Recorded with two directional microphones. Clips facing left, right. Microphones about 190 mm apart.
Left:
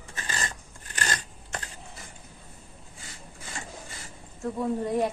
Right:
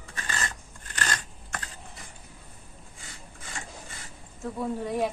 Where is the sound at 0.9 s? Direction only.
25° left (ahead or behind).